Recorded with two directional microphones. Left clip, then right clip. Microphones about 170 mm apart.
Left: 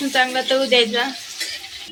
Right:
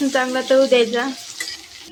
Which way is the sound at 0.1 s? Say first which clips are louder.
Left 1 dB; 35° right (ahead or behind).